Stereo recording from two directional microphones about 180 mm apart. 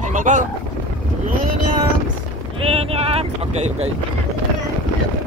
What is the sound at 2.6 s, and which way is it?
Speech, 35° right (ahead or behind).